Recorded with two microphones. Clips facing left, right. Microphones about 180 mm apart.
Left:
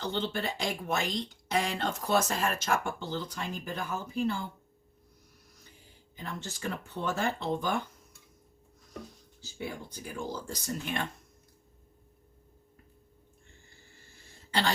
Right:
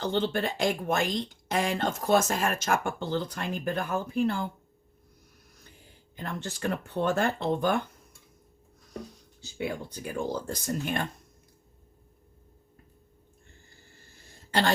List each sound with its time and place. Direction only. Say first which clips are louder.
0.0 s speech: right 5 dB; 50° right (ahead or behind)
6.1 s speech: right 4 dB; 60° right (ahead or behind)
9.6 s speech: right 6 dB; 70° right (ahead or behind); by 11.0 s 50° right (ahead or behind)